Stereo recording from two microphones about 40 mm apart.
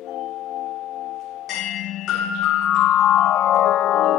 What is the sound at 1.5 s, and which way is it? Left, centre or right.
Music, centre.